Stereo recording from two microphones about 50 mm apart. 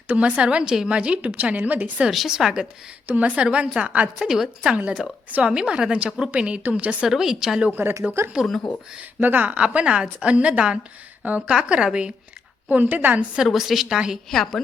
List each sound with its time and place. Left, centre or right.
0.1 s a woman's voice: right
2.0 s speech: centre
3.1 s a woman's voice: right
4.2 s a woman's voice: centre; by 7.1 s right
7.1 s speech: centre
7.7 s speech: right
8.2 s speech: right
9.0 s speech: right
9.6 s a woman's voice: right
11.4 s speech: centre
12.6 s speech: right
13.5 s a woman's voice: centre
14.3 s a woman's voice: centre